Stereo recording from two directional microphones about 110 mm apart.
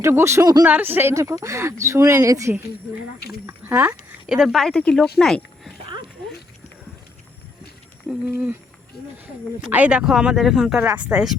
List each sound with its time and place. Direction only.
0.0 s speech: 25° right (ahead or behind)
0.6 s speech: 15° right (ahead or behind)
4.3 s speech: 5° right (ahead or behind)
5.8 s dog: 50° right (ahead or behind)
8.0 s speech: 15° right (ahead or behind)
9.7 s speech: 10° right (ahead or behind)